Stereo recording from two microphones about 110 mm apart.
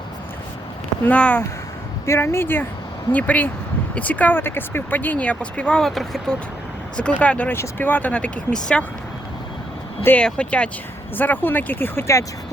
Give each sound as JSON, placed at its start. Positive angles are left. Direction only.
{"t": 1.0, "sound": "speech", "side_deg": 15}
{"t": 2.0, "sound": "speech", "side_deg": 25}
{"t": 10.0, "sound": "speech", "side_deg": 15}